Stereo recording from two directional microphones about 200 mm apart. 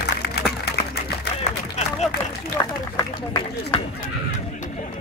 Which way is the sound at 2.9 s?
20° left (ahead or behind).